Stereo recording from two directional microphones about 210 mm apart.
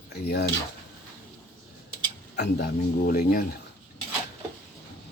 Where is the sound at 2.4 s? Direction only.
50° left (ahead or behind).